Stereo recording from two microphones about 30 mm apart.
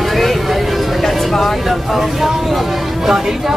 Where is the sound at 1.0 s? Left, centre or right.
Centre.